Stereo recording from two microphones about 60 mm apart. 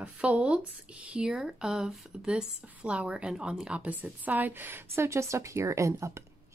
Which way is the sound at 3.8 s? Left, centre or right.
Right.